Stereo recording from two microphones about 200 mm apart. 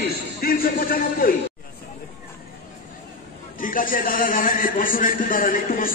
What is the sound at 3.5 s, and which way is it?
A man's voice, 45° left (ahead or behind).